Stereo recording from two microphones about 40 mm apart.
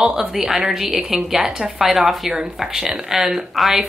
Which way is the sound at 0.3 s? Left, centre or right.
Centre.